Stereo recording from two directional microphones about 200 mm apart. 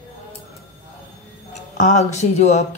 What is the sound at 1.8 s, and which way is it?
Speech, 35° left (ahead or behind).